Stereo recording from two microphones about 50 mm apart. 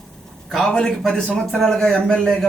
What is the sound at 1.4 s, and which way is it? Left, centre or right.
Speech, centre.